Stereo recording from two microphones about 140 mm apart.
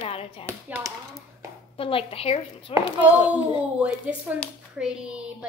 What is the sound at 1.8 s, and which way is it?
Speech, 40° left (ahead or behind).